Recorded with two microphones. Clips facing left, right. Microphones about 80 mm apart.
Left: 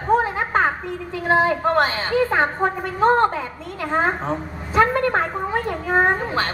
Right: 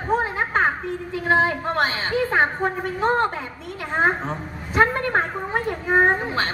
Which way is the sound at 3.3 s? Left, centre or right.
Right.